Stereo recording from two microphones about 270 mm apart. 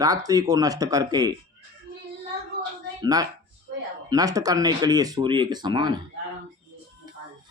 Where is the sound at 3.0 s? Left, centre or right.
Centre.